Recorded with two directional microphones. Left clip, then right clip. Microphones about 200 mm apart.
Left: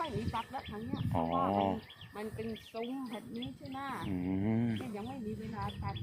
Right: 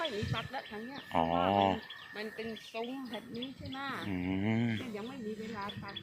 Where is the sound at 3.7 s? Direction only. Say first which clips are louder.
Right 1 dB; 55° left (ahead or behind).